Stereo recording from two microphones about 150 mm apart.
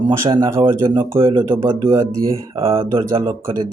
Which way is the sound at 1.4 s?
20° right (ahead or behind).